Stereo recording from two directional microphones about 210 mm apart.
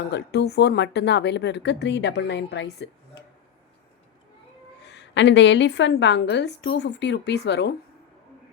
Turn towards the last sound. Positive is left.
turn(degrees=55)  # may be behind; listen again after turning